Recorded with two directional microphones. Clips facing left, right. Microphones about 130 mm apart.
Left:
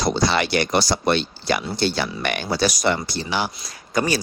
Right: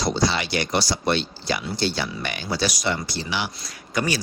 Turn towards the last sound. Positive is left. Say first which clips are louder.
# left 3 dB
turn(degrees=40)  # may be behind; listen again after turning